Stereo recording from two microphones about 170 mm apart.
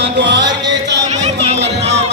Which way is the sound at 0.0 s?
90° right.